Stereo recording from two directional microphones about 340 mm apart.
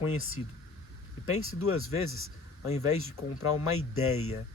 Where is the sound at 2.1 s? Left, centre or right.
Left.